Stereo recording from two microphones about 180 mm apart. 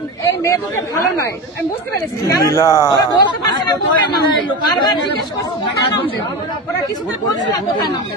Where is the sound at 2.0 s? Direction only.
20° left (ahead or behind).